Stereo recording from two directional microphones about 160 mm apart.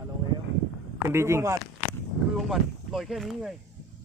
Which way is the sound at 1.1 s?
15° right (ahead or behind).